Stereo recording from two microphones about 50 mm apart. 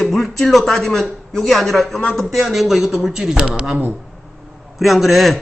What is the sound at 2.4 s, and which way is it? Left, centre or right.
Speech, centre.